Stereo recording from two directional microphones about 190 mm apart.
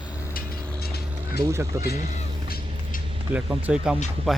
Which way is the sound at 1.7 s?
15° right (ahead or behind).